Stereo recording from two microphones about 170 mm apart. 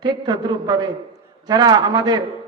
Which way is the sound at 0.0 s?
25° right (ahead or behind).